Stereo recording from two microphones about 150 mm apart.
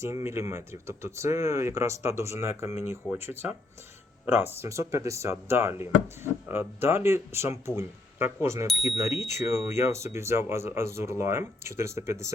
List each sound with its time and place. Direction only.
0.0 s speech: 20° right (ahead or behind)
4.6 s speech: 20° right (ahead or behind)